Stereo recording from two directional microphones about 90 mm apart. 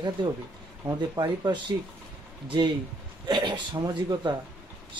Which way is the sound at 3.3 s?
60° right (ahead or behind).